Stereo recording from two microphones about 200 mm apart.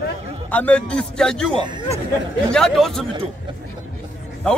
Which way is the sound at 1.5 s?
20° right (ahead or behind).